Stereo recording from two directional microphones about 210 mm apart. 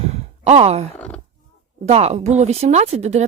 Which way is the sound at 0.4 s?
30° right (ahead or behind).